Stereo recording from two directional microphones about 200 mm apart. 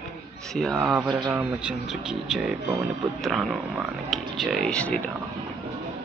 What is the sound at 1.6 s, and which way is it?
Speech, 5° right (ahead or behind).